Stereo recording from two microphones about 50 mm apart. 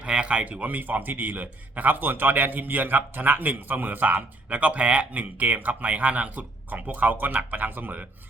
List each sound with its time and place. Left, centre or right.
0.0 s a man's voice: right